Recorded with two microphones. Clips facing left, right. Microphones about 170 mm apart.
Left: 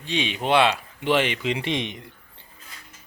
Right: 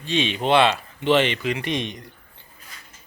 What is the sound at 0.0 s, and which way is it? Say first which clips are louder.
A man's voice: right 3 dB; 15° left (ahead or behind).